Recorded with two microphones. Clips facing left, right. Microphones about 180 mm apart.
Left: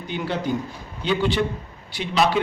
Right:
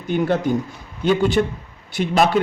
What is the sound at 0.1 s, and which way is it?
A man's voice, 50° right (ahead or behind).